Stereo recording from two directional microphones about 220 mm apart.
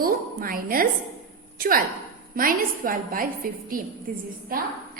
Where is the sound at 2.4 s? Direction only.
40° right (ahead or behind).